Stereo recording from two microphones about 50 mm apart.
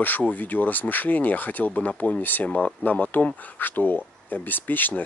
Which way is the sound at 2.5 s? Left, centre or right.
Left.